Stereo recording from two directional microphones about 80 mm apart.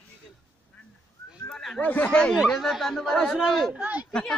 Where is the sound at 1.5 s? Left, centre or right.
Centre.